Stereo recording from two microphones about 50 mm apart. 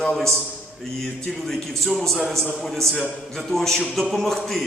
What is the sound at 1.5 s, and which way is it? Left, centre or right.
A man's voice, centre.